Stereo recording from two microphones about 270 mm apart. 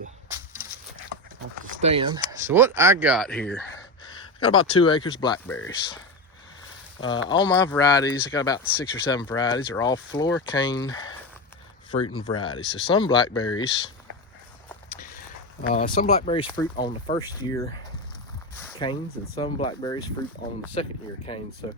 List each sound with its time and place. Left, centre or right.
0.3 s a sound: centre
1.8 s speech: right
2.4 s speech: centre
4.0 s speech: centre
7.3 s speech: centre
15.7 s speech: left
18.6 s a sound: centre
19.4 s speech: centre